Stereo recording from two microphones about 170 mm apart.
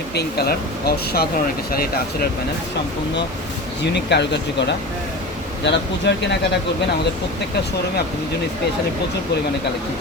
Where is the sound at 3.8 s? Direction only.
90° left.